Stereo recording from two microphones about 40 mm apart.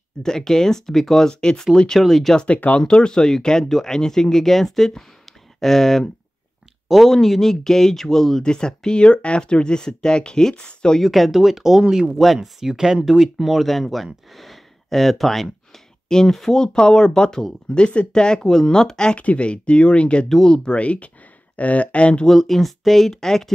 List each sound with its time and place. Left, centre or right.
0.2 s speech: centre
1.3 s speech: left
2.0 s speech: centre
2.3 s speech: left
2.8 s speech: left
11.0 s speech: centre
16.6 s speech: centre
19.1 s speech: left
20.8 s speech: left
22.2 s speech: centre